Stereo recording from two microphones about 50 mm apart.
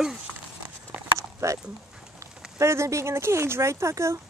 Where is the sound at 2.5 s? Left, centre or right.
Right.